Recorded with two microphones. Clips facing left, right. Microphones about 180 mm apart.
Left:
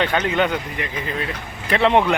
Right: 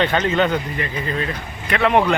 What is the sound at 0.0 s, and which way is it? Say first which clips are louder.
Speech: right 2 dB; 10° left (ahead or behind).